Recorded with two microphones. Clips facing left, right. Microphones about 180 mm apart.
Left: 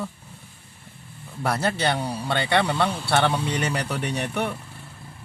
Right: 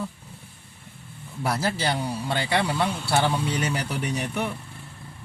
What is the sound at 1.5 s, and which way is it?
Speech, 65° left (ahead or behind).